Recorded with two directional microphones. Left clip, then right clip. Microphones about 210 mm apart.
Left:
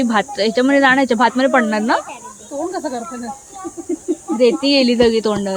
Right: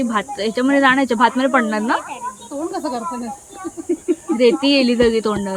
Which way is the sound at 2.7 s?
50° right (ahead or behind).